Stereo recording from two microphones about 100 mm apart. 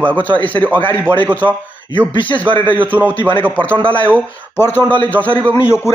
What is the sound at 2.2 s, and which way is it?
A man's voice, 15° left (ahead or behind).